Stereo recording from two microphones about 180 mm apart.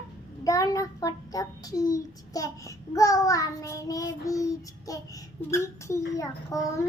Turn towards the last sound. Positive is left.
turn(degrees=20)  # may be behind; listen again after turning